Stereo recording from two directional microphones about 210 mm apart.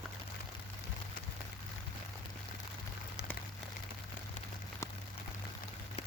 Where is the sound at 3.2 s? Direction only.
55° left (ahead or behind).